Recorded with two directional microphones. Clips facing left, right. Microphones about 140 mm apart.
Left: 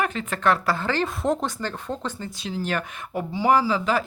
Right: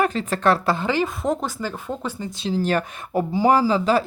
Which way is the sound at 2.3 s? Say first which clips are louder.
Right 7 dB; 30° right (ahead or behind).